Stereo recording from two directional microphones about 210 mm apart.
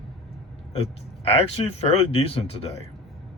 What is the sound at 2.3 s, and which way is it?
Speech, 30° left (ahead or behind).